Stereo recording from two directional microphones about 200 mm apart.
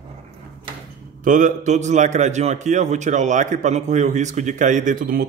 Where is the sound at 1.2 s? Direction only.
40° right (ahead or behind).